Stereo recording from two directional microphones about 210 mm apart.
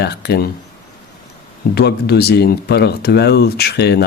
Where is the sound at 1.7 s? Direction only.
50° left (ahead or behind).